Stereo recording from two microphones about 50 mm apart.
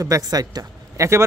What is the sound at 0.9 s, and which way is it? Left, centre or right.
Speech, right.